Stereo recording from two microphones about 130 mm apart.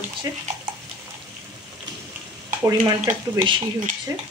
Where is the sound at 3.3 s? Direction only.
40° right (ahead or behind).